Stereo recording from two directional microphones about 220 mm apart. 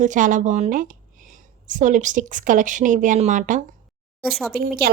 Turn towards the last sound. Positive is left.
turn(degrees=-45)  # may be behind; listen again after turning